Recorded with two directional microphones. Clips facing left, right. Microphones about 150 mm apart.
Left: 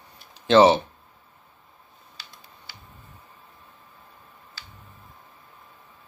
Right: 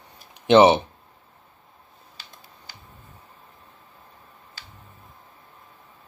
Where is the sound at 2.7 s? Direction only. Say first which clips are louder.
Right 1 dB; 45° right (ahead or behind).